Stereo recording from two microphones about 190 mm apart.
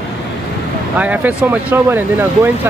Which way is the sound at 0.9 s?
10° right (ahead or behind).